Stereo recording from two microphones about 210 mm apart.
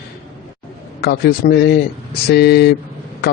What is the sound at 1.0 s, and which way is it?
A man's voice, 50° left (ahead or behind).